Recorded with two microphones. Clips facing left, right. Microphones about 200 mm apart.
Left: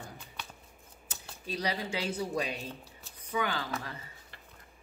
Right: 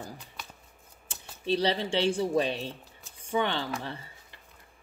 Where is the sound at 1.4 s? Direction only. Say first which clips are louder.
Right 7 dB; 30° right (ahead or behind).